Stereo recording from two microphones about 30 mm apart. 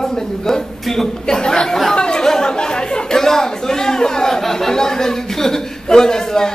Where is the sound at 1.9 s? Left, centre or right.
Left.